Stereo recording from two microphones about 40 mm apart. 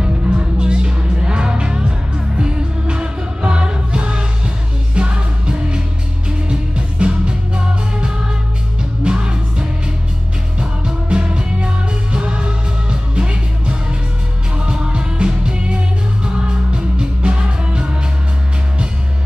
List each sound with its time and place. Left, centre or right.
0.0 s music: right